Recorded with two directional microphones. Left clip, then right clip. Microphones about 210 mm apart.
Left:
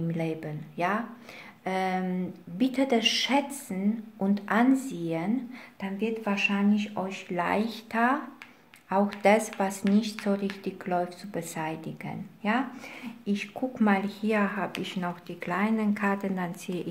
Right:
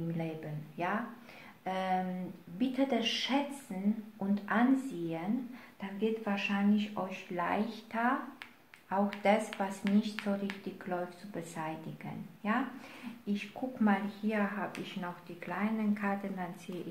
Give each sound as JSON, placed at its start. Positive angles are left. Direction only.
{"t": 0.1, "sound": "speech", "side_deg": 45}